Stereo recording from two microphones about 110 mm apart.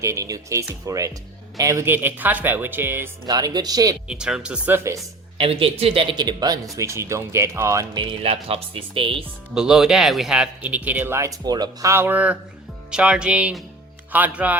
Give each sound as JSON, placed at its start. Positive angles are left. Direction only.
{"t": 0.0, "sound": "speech", "side_deg": -30}
{"t": 3.2, "sound": "speech", "side_deg": -35}
{"t": 4.1, "sound": "speech", "side_deg": -10}
{"t": 5.4, "sound": "speech", "side_deg": -60}
{"t": 6.1, "sound": "speech", "side_deg": -40}
{"t": 7.9, "sound": "speech", "side_deg": -60}
{"t": 9.6, "sound": "speech", "side_deg": -5}
{"t": 11.9, "sound": "speech", "side_deg": -20}